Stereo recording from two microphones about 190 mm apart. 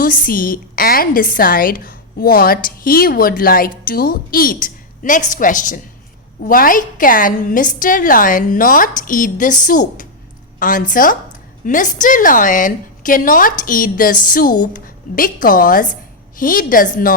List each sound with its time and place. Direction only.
0.0 s a woman's voice: 45° left (ahead or behind)